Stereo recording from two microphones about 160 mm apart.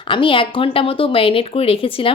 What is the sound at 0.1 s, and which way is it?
Speech, 30° left (ahead or behind).